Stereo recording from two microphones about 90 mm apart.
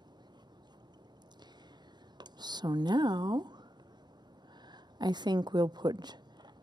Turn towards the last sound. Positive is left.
turn(degrees=-55)  # may be behind; listen again after turning